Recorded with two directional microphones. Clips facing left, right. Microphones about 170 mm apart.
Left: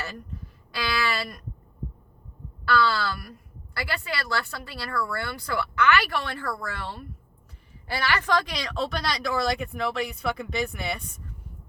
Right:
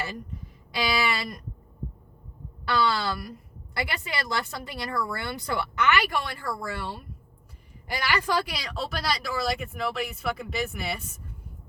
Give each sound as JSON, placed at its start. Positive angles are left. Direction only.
{"t": 0.7, "sound": "speech", "side_deg": -20}
{"t": 2.6, "sound": "speech", "side_deg": -20}